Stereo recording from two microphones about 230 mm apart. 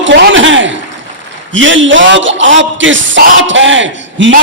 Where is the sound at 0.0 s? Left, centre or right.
Right.